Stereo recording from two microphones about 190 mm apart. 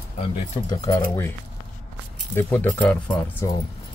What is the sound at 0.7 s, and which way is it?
Speech, 20° left (ahead or behind).